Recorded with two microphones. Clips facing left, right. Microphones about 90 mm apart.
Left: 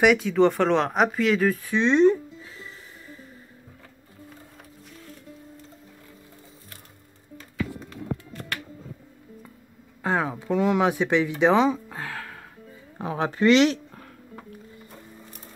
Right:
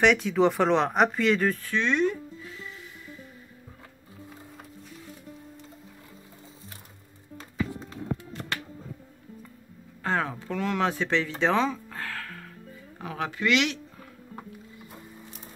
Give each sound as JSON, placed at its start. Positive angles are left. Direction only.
{"t": 0.0, "sound": "speech", "side_deg": 0}
{"t": 1.6, "sound": "music", "side_deg": 20}
{"t": 10.0, "sound": "speech", "side_deg": 15}
{"t": 12.9, "sound": "speech", "side_deg": 30}